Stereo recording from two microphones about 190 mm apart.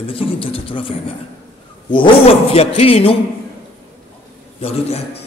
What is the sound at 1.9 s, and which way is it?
Speech, 30° left (ahead or behind).